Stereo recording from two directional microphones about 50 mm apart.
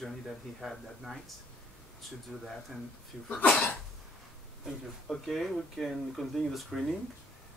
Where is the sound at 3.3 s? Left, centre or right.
Left.